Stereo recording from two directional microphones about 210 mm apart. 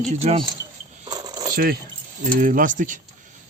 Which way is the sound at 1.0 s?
20° right (ahead or behind).